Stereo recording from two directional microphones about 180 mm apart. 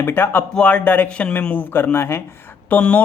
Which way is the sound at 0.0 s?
10° left (ahead or behind).